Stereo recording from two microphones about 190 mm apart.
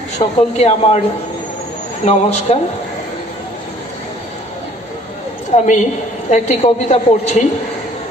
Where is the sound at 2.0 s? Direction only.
35° left (ahead or behind).